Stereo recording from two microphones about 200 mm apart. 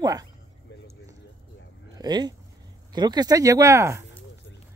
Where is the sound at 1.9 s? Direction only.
20° right (ahead or behind).